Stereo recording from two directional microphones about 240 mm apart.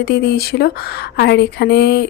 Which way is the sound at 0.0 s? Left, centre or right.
Left.